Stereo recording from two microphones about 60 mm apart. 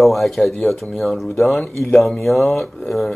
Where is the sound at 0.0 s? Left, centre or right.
Centre.